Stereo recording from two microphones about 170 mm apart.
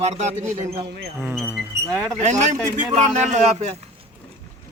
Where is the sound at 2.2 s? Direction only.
45° right (ahead or behind).